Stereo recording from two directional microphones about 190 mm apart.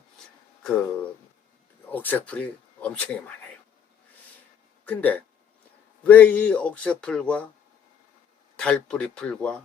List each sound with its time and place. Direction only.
0.6 s speech: 5° left (ahead or behind)
4.9 s speech: 5° left (ahead or behind)
8.5 s speech: 5° left (ahead or behind)